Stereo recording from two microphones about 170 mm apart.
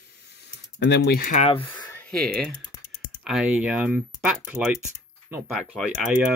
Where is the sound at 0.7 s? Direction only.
90° left.